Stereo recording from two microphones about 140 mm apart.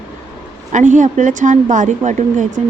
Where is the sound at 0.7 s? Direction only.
60° right (ahead or behind).